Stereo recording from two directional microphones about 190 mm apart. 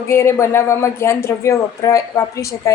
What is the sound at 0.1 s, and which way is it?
A woman's voice, 15° left (ahead or behind).